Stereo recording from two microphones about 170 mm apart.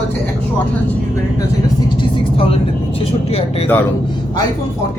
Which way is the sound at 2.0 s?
35° left (ahead or behind).